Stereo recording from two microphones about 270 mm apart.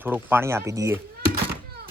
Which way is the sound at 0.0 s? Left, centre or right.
Centre.